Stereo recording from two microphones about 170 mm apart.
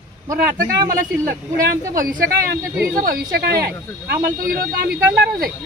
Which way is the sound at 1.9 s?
55° right (ahead or behind).